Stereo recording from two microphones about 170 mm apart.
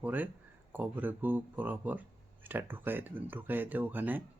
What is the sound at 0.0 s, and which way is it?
Speech, 10° right (ahead or behind).